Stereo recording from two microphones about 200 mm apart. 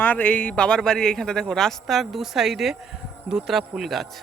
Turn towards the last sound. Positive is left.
turn(degrees=0)  # may be behind; listen again after turning